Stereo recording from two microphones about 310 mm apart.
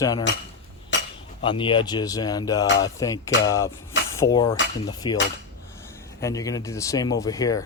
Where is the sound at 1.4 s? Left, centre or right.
Centre.